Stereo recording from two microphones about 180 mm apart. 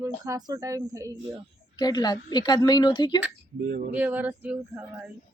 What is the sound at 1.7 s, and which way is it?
A woman's voice, 20° left (ahead or behind).